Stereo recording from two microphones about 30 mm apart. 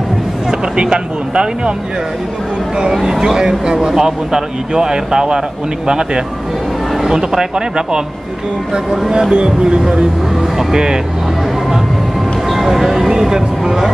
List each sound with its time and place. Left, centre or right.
0.5 s speech: right
2.9 s speech: centre
9.3 s speech: right
12.4 s a sound: centre